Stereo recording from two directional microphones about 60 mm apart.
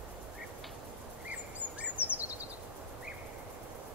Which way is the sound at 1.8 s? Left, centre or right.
Right.